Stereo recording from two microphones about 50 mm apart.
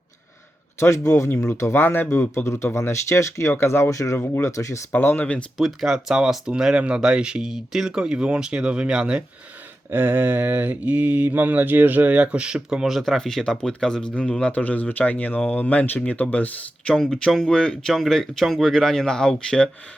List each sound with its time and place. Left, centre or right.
0.8 s speech: left
1.7 s speech: left
2.3 s a man's voice: left
3.6 s speech: left
5.2 s speech: left
5.5 s speech: centre
9.9 s a sound: right
12.1 s speech: right
13.0 s speech: centre
14.1 s speech: left
16.9 s speech: centre